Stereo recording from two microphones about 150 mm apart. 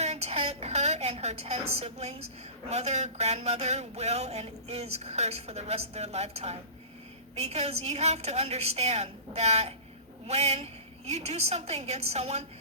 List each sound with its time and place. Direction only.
0.0 s a woman's voice: 45° right (ahead or behind)